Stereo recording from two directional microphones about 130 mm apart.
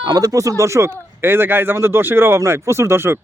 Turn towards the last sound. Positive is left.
turn(degrees=-20)  # may be behind; listen again after turning